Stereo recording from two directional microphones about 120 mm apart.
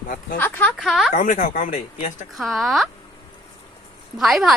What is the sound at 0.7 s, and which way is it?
Speech, centre (ahead or behind).